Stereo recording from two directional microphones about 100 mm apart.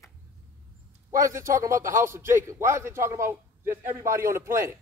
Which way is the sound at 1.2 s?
30° right (ahead or behind).